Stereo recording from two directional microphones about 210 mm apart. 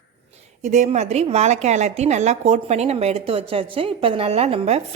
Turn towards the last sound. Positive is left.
turn(degrees=-30)  # may be behind; listen again after turning